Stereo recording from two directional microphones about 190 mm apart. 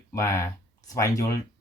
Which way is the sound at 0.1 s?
15° left (ahead or behind).